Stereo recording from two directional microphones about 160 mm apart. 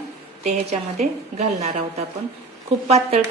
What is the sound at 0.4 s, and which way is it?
A woman's voice, 40° right (ahead or behind).